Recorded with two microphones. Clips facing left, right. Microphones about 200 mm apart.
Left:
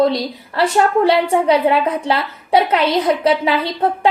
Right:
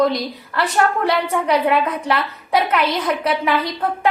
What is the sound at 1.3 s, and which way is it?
A woman's voice, 30° left (ahead or behind).